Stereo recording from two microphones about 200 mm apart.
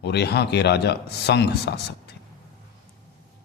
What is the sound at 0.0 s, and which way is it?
A man's voice, 55° left (ahead or behind).